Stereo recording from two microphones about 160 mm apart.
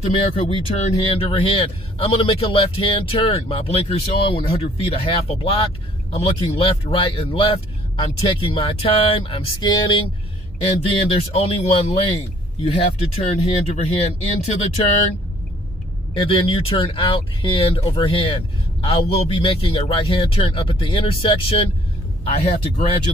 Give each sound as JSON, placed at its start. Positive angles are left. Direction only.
{"t": 0.0, "sound": "speech", "side_deg": 35}
{"t": 11.1, "sound": "speech", "side_deg": 40}
{"t": 16.2, "sound": "speech", "side_deg": 35}